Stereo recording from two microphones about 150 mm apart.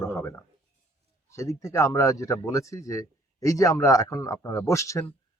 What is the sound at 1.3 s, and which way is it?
A man's voice, 20° left (ahead or behind).